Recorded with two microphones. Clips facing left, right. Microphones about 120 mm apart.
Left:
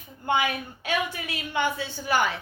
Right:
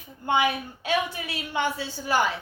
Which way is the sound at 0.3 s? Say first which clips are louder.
Right 2 dB; 30° right (ahead or behind).